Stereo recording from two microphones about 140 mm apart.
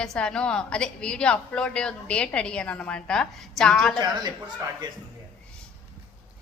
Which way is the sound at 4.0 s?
30° right (ahead or behind).